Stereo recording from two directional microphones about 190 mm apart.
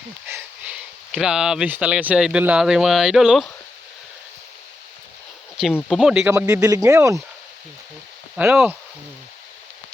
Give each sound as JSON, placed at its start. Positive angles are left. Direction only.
{"t": 0.3, "sound": "speech", "side_deg": -10}
{"t": 5.9, "sound": "speech", "side_deg": -5}
{"t": 6.3, "sound": "speech", "side_deg": -15}
{"t": 8.4, "sound": "speech", "side_deg": -10}